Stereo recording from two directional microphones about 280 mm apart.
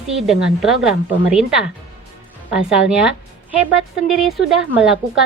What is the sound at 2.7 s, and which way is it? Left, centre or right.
A woman's voice, centre.